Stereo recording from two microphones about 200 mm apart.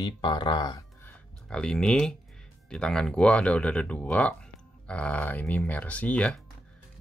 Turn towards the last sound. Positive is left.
turn(degrees=5)  # may be behind; listen again after turning